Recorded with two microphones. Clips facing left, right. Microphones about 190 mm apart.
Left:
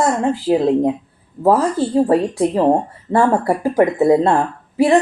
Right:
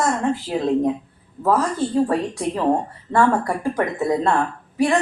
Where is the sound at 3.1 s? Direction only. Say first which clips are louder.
Left 3 dB; 25° left (ahead or behind).